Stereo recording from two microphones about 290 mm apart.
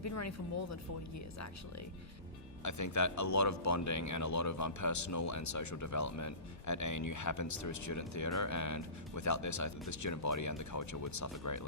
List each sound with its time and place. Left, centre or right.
0.0 s speech: left
2.6 s speech: left